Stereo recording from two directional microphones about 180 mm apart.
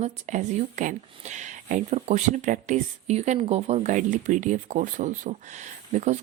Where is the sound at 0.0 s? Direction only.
45° right (ahead or behind).